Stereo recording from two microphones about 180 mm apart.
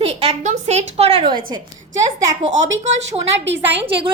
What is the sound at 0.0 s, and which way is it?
A woman's voice, 35° right (ahead or behind).